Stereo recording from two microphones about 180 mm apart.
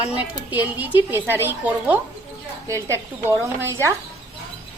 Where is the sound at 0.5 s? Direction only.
10° right (ahead or behind).